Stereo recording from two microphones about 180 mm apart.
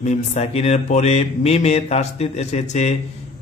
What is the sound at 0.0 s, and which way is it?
Speech, 40° left (ahead or behind).